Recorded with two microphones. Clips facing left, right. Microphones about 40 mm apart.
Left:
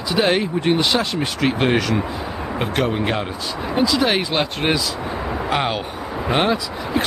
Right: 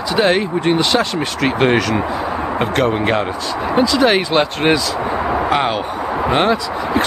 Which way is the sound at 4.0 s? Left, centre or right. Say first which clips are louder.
Right 5 dB; centre.